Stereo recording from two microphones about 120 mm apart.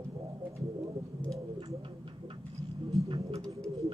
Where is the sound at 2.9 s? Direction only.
55° right (ahead or behind).